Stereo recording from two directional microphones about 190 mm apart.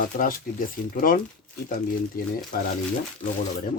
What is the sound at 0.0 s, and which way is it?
Speech, 45° left (ahead or behind).